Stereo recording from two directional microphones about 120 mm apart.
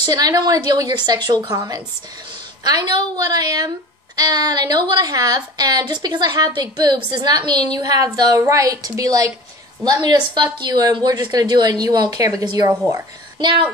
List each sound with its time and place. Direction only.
0.0 s a woman's voice: 35° right (ahead or behind)